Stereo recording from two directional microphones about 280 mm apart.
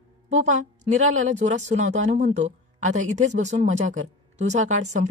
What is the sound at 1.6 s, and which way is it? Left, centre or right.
A woman's voice, right.